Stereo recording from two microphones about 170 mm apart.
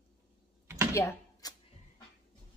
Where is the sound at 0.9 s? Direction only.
15° left (ahead or behind).